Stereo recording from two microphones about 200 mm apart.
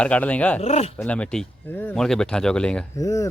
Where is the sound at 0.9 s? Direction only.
5° left (ahead or behind).